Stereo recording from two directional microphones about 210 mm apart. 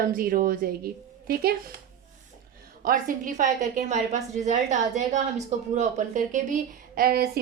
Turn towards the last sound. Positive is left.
turn(degrees=-45)  # may be behind; listen again after turning